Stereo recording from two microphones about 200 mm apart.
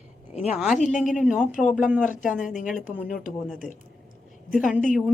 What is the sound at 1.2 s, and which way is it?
Speech, centre (ahead or behind).